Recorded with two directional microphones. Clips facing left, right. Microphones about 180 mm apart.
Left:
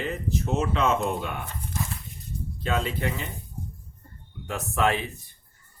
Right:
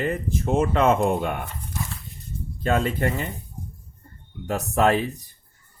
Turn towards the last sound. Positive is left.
turn(degrees=-40)  # may be behind; listen again after turning